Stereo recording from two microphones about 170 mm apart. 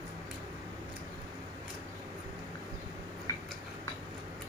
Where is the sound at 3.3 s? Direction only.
20° left (ahead or behind).